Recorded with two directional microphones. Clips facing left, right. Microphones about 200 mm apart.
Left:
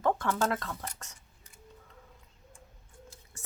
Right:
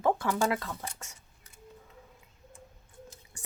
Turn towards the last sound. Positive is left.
turn(degrees=-15)  # may be behind; listen again after turning